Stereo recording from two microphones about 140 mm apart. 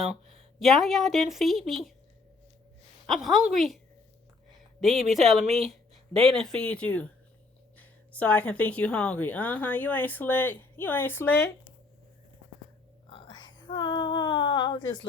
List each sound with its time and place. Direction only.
0.0 s a woman's voice: centre (ahead or behind)
3.1 s a woman's voice: centre (ahead or behind)
4.8 s a woman's voice: centre (ahead or behind); by 11.7 s 15° left (ahead or behind)
13.1 s a sound: 35° left (ahead or behind)